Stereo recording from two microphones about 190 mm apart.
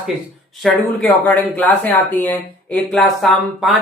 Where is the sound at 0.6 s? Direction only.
5° left (ahead or behind).